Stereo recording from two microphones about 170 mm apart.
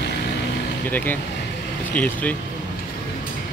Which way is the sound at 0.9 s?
10° left (ahead or behind).